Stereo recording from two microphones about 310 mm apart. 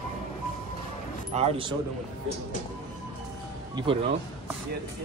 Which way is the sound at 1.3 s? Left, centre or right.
Centre.